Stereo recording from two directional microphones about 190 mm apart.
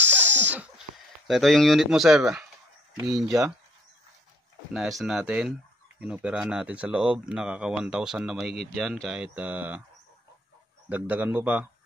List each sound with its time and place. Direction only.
0.0 s sniff: 10° right (ahead or behind)
3.3 s a man's voice: 15° right (ahead or behind)
4.7 s speech: centre (ahead or behind)
10.9 s a man's voice: 10° right (ahead or behind)